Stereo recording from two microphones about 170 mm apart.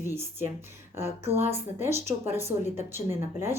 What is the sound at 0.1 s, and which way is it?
Speech, 15° right (ahead or behind).